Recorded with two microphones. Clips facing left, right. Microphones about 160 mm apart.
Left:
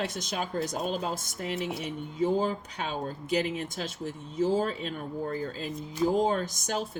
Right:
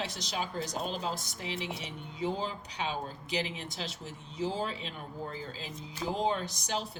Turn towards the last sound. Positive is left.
turn(degrees=50)  # may be behind; listen again after turning